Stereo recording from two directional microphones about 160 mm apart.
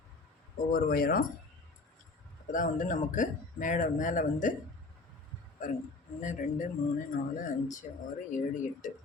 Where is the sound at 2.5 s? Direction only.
55° left (ahead or behind).